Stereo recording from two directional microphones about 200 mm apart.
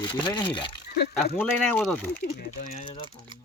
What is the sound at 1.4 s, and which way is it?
Speech, 5° left (ahead or behind).